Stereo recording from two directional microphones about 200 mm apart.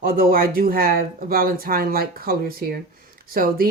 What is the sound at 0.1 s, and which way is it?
Speech, 45° right (ahead or behind).